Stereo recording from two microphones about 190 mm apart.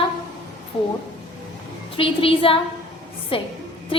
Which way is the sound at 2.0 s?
30° left (ahead or behind).